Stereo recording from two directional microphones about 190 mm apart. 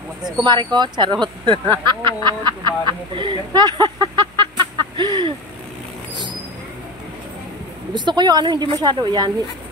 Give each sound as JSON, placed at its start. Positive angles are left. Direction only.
{"t": 0.4, "sound": "speech", "side_deg": -25}
{"t": 7.9, "sound": "speech", "side_deg": -25}